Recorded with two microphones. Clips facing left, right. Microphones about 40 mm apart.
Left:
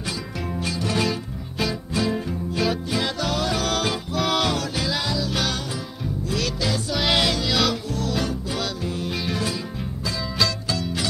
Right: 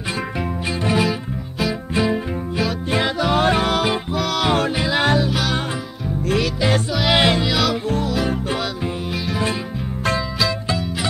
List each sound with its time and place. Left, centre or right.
0.7 s music: right
3.3 s music: right
3.6 s music: right
4.5 s music: right
4.9 s music: right
6.9 s music: centre
7.2 s music: right
7.4 s music: centre
10.8 s music: centre